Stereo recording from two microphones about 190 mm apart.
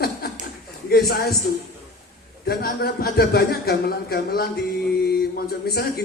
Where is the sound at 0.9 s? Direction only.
55° left (ahead or behind).